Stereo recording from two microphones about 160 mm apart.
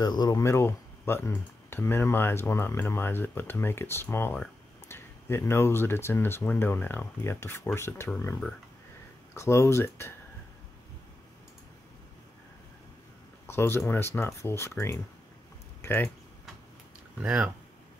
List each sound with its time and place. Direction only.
0.0 s speech: 25° left (ahead or behind)
9.3 s speech: 15° left (ahead or behind)
13.5 s speech: 15° left (ahead or behind)
17.2 s speech: 5° right (ahead or behind)